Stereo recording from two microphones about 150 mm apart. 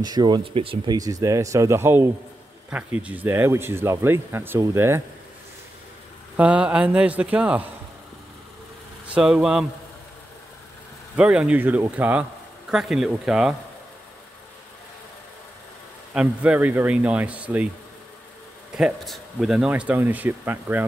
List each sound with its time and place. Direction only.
0.0 s speech: 30° right (ahead or behind)
0.9 s speech: 25° right (ahead or behind)
6.3 s speech: 10° right (ahead or behind)
9.0 s speech: 5° right (ahead or behind)
11.1 s speech: 5° right (ahead or behind)
16.1 s speech: 10° right (ahead or behind)
18.8 s speech: centre (ahead or behind)